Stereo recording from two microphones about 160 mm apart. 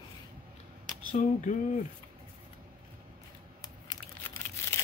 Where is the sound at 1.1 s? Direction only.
50° left (ahead or behind).